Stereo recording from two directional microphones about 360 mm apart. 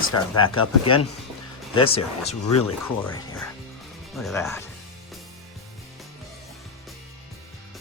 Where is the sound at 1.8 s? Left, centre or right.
Left.